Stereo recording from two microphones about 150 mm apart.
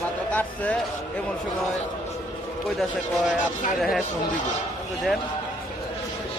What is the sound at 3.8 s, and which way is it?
Speech, centre (ahead or behind).